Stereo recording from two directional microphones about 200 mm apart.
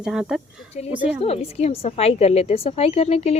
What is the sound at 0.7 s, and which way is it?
A woman's voice, 30° left (ahead or behind).